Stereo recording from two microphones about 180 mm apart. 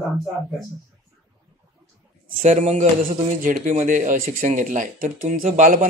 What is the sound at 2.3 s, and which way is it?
A man's voice, 40° right (ahead or behind).